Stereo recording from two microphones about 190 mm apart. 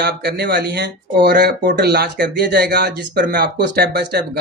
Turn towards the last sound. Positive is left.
turn(degrees=-60)  # may be behind; listen again after turning